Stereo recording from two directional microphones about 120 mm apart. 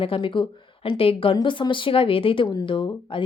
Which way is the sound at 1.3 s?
40° left (ahead or behind).